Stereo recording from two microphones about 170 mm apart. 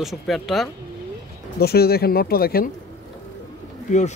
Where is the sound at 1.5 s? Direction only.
65° left (ahead or behind).